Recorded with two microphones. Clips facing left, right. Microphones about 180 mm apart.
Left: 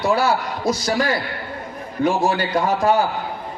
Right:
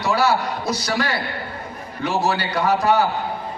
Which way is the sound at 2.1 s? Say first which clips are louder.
Left 2 dB; 50° left (ahead or behind).